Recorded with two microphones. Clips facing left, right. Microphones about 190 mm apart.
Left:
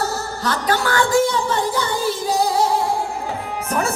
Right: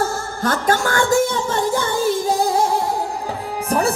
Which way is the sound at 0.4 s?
45° right (ahead or behind).